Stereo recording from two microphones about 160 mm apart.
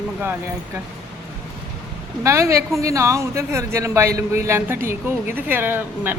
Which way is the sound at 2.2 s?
20° right (ahead or behind).